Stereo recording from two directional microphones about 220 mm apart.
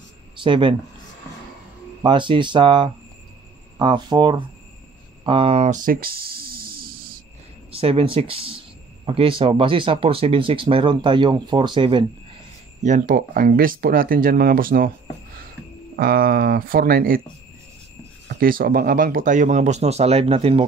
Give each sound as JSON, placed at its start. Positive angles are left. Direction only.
{"t": 0.4, "sound": "speech", "side_deg": -25}
{"t": 2.0, "sound": "speech", "side_deg": -20}
{"t": 5.9, "sound": "a sound", "side_deg": -40}
{"t": 7.7, "sound": "speech", "side_deg": -25}
{"t": 12.8, "sound": "speech", "side_deg": -35}
{"t": 16.0, "sound": "speech", "side_deg": -45}
{"t": 18.3, "sound": "speech", "side_deg": -40}